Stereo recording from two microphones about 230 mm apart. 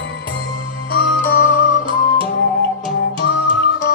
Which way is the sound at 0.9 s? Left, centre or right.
Left.